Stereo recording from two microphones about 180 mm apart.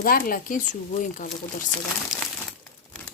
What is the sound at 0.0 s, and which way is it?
Speech, 50° left (ahead or behind).